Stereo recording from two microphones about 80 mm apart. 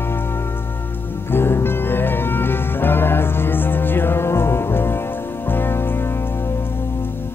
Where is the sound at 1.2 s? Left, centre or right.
Left.